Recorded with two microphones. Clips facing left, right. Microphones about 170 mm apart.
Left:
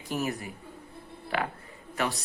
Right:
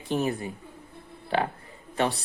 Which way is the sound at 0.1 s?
30° right (ahead or behind).